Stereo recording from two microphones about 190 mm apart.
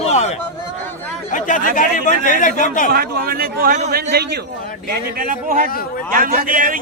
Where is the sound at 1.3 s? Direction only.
40° left (ahead or behind).